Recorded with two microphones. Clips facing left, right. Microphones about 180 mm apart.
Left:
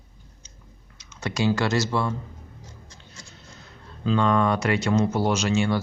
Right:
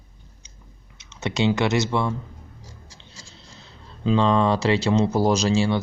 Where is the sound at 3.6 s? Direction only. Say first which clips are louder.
Right 2 dB; 25° right (ahead or behind).